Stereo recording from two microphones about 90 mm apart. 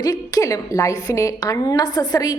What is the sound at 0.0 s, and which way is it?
A woman's voice, 45° left (ahead or behind).